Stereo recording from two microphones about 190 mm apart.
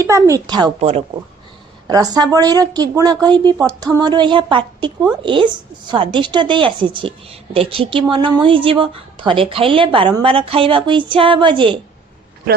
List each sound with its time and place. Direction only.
0.0 s a woman's voice: 15° right (ahead or behind)
0.8 s speech: 35° right (ahead or behind)
1.9 s speech: 20° right (ahead or behind)